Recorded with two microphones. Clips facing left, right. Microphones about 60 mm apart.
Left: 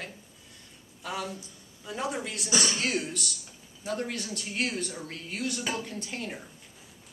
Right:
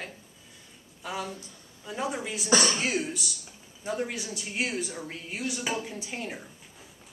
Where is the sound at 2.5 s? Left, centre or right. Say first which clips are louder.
Right 5 dB; right.